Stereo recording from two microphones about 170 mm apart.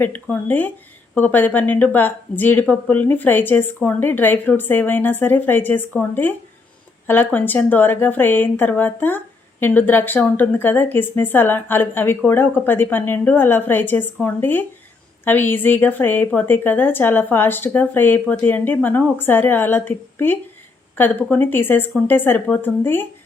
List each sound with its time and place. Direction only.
0.0 s speech: 10° left (ahead or behind)